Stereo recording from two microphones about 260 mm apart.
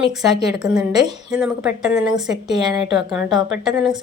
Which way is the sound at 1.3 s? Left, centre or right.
Centre.